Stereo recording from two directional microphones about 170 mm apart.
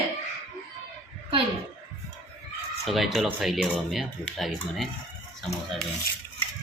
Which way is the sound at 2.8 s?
Centre (ahead or behind).